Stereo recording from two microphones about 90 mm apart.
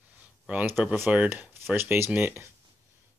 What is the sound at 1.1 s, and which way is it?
Speech, 15° right (ahead or behind).